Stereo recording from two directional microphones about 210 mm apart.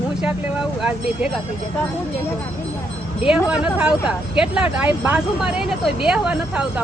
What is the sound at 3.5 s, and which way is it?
A woman's voice, 5° right (ahead or behind).